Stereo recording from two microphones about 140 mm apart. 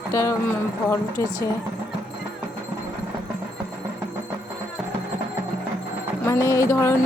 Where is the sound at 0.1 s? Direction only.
20° left (ahead or behind).